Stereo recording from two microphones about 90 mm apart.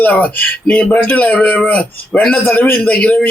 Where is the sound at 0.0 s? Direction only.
20° left (ahead or behind).